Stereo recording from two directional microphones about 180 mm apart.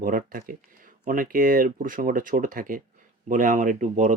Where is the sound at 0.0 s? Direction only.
50° right (ahead or behind).